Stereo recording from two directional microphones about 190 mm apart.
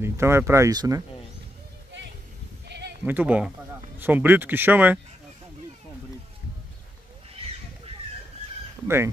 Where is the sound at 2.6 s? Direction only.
60° right (ahead or behind).